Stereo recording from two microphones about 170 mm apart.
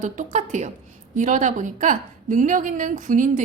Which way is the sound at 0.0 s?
45° right (ahead or behind).